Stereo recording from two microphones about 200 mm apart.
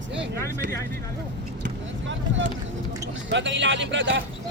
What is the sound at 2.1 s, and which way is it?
Speech, 70° right (ahead or behind).